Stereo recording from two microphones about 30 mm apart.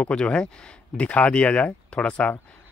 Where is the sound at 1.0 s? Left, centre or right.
Left.